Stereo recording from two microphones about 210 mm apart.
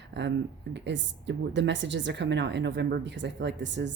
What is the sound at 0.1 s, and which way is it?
Speech, 55° right (ahead or behind).